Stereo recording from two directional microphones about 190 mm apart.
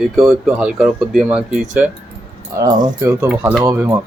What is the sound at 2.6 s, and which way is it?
Speech, 20° right (ahead or behind).